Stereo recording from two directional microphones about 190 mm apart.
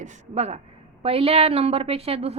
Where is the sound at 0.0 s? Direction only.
35° right (ahead or behind).